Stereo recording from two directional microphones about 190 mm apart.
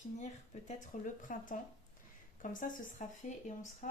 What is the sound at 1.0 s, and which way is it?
Speech, 45° left (ahead or behind).